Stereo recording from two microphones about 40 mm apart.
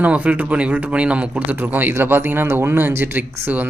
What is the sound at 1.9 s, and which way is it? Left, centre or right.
Speech, right.